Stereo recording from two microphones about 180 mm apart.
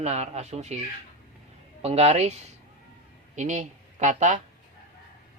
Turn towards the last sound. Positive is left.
turn(degrees=-40)  # may be behind; listen again after turning